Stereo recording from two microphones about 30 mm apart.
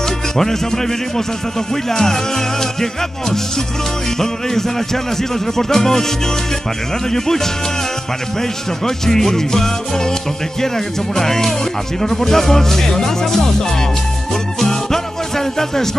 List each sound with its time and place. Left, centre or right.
0.0 s music: centre
1.7 s speech: centre
11.1 s speech: centre
14.3 s music: centre